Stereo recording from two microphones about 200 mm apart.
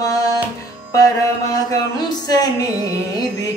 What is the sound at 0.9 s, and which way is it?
Mantra, 15° left (ahead or behind).